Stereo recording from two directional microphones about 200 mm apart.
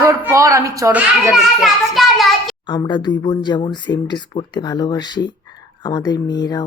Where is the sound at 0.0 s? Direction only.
15° right (ahead or behind).